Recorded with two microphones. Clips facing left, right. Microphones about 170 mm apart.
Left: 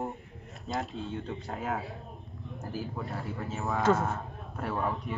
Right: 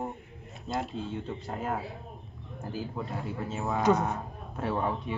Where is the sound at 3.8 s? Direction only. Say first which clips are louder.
Right 1 dB; 20° right (ahead or behind).